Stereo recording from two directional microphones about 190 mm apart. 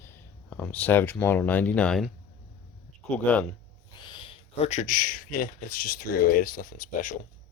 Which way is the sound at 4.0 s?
25° left (ahead or behind).